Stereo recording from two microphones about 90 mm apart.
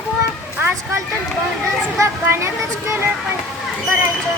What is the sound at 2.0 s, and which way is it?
Speech, 30° right (ahead or behind).